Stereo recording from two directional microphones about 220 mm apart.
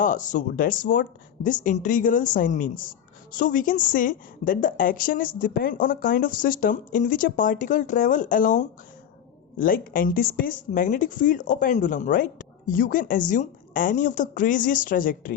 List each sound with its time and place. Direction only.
0.0 s speech: 35° left (ahead or behind)